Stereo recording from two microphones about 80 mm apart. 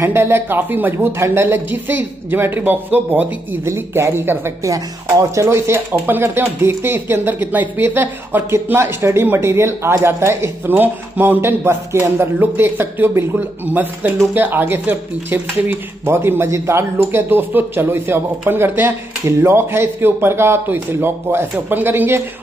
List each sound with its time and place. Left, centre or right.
0.0 s speech: right
1.2 s speech: right
3.6 s speech: right